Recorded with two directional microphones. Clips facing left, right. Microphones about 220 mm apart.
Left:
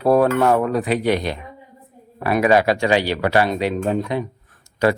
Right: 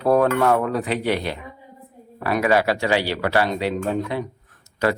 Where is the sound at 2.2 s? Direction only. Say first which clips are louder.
Left 3 dB; 15° left (ahead or behind).